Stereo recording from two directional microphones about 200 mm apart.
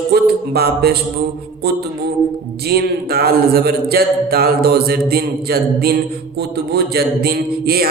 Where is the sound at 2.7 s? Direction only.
50° right (ahead or behind).